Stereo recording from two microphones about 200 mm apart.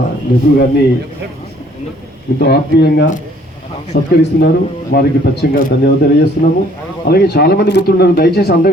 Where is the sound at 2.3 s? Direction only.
55° left (ahead or behind).